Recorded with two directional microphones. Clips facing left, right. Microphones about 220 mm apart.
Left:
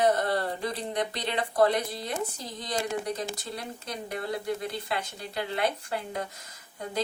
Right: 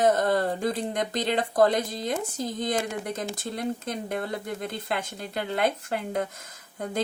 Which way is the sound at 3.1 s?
50° right (ahead or behind).